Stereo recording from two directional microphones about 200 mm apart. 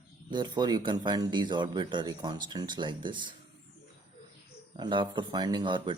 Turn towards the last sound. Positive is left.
turn(degrees=-25)  # may be behind; listen again after turning